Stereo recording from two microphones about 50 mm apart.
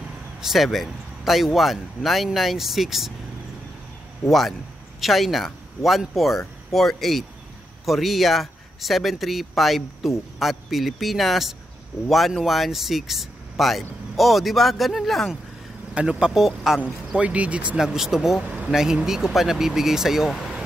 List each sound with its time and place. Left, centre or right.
0.4 s speech: centre
4.3 s speech: centre
15.9 s speech: right; by 16.8 s centre
17.2 s speech: right
17.7 s speech: centre